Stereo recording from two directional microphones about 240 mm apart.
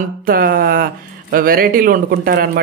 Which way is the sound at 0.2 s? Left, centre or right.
Right.